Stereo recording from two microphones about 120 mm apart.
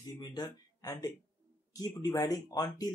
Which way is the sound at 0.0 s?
35° left (ahead or behind).